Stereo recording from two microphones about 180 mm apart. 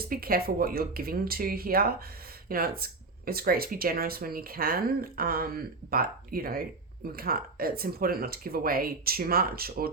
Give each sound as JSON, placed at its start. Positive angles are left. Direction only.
{"t": 0.0, "sound": "speech", "side_deg": -55}